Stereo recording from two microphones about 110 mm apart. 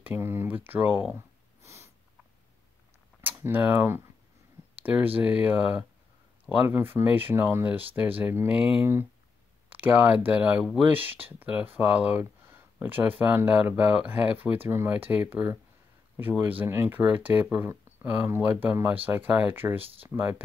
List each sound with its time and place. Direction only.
0.0 s speech: 20° right (ahead or behind)
1.6 s snort: 25° right (ahead or behind)
3.2 s speech: 20° right (ahead or behind)